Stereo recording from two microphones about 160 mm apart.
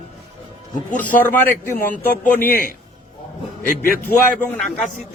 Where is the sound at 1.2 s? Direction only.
15° left (ahead or behind).